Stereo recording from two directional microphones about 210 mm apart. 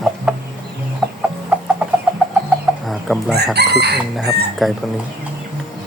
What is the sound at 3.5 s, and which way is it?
Chicken, 50° right (ahead or behind).